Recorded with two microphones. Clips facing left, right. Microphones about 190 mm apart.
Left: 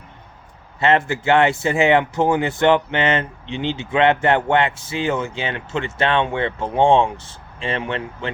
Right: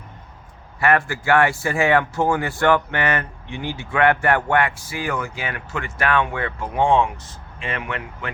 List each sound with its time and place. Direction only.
0.8 s speech: 20° left (ahead or behind)